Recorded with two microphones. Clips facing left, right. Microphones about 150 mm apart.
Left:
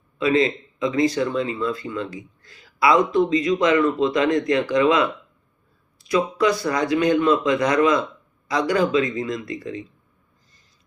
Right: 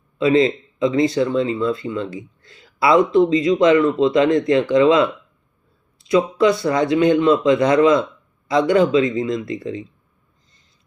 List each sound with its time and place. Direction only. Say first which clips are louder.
0.2 s speech: right 4 dB; 25° right (ahead or behind)